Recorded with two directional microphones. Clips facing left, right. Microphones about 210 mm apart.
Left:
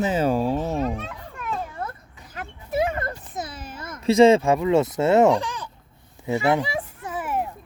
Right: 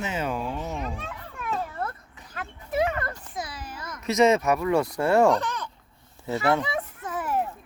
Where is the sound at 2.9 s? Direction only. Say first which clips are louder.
Left 2 dB; 25° left (ahead or behind).